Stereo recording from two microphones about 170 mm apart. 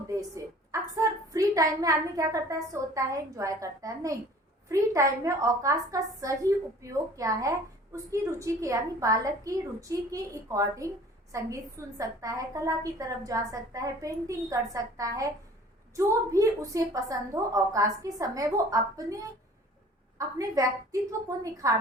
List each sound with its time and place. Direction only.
0.2 s a woman's voice: 20° right (ahead or behind)